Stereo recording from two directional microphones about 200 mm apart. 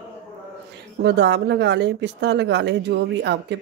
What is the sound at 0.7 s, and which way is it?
Speech, 60° right (ahead or behind).